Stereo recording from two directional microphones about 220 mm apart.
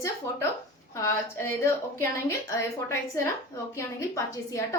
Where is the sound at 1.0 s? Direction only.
10° left (ahead or behind).